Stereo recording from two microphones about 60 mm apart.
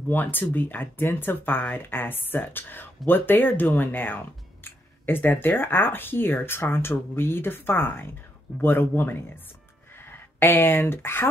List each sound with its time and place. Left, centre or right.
0.1 s speech: left